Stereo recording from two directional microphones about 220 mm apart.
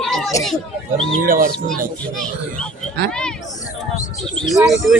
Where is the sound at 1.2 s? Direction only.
40° right (ahead or behind).